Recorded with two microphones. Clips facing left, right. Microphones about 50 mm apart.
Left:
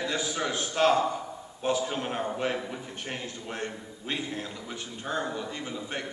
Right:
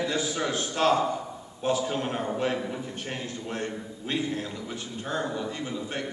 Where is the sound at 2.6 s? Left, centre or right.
Centre.